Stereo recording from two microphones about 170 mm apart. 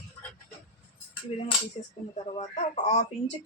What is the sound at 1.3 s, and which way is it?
Speech, 35° left (ahead or behind).